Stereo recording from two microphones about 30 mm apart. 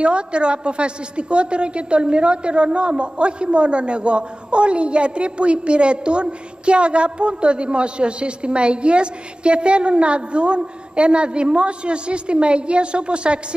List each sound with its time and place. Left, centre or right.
0.0 s a woman's voice: right